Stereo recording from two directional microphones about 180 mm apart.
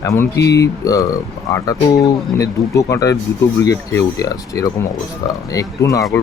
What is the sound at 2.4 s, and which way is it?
Speech, 15° left (ahead or behind).